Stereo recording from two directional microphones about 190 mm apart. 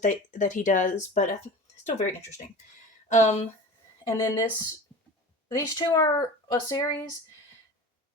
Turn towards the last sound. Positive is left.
turn(degrees=20)  # may be behind; listen again after turning